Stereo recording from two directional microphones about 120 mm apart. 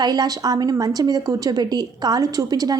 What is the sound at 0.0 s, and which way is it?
A woman's voice, 35° right (ahead or behind).